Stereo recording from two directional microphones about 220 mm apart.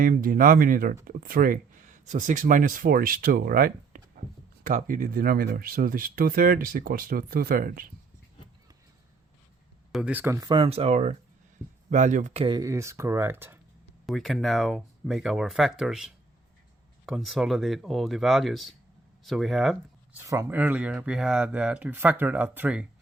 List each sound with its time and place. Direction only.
0.0 s speech: 40° right (ahead or behind)
9.9 s speech: 5° right (ahead or behind)
14.1 s speech: centre (ahead or behind)
20.1 s speech: 10° right (ahead or behind)